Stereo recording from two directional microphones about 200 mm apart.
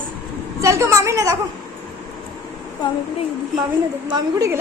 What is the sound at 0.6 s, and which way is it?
Speech, 15° right (ahead or behind).